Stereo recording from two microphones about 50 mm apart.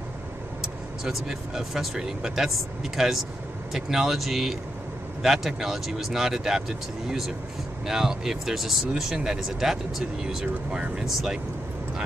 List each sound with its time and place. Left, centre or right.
0.6 s speech: centre
10.2 s speech: centre
11.1 s speech: centre